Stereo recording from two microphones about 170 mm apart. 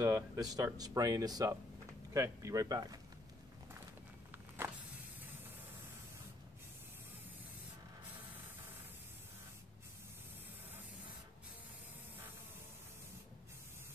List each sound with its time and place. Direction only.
0.0 s speech: 20° right (ahead or behind)